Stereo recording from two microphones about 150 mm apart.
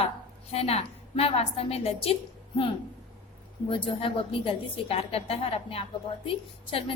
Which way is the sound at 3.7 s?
35° left (ahead or behind).